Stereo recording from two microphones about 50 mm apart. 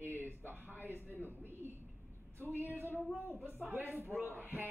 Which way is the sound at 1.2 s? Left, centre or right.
Right.